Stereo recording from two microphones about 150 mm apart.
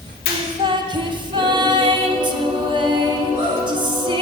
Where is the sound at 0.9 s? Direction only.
30° right (ahead or behind).